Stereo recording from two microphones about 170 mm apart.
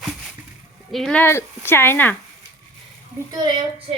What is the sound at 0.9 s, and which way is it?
Speech, centre (ahead or behind).